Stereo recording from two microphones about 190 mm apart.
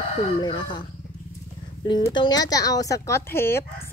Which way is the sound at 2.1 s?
20° left (ahead or behind).